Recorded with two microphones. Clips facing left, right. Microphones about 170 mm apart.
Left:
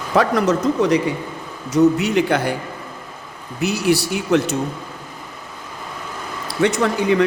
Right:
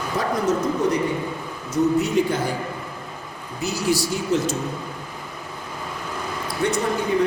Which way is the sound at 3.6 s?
65° left (ahead or behind).